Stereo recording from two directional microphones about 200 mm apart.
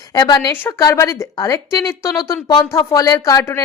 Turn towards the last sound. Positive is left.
turn(degrees=15)  # may be behind; listen again after turning